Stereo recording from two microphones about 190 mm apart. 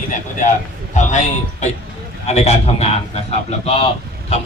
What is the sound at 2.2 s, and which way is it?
A man's voice, 35° left (ahead or behind).